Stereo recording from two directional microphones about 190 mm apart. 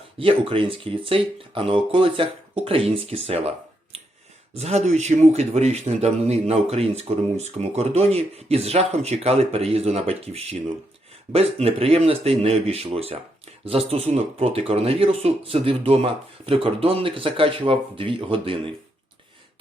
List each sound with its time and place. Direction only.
0.2 s speech: 30° right (ahead or behind)
4.5 s speech: 35° right (ahead or behind)